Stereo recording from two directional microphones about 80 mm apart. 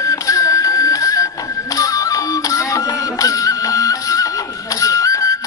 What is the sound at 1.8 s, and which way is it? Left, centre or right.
Music, left.